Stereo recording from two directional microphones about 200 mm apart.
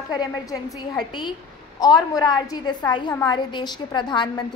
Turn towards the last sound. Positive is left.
turn(degrees=20)  # may be behind; listen again after turning